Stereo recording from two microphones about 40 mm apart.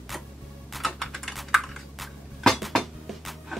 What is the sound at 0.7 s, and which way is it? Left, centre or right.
Typing, centre.